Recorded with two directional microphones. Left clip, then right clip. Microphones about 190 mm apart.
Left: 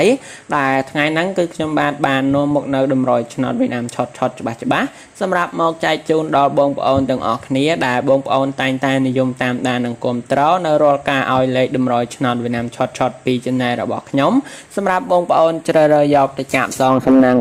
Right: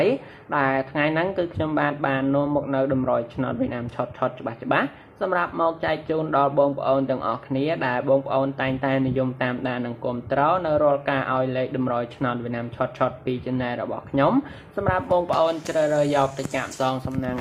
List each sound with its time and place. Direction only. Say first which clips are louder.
0.0 s speech: left 7 dB; 60° left (ahead or behind); by 17.3 s 35° left (ahead or behind)